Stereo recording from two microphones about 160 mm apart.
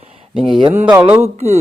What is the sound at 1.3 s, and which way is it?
Speech, 40° right (ahead or behind).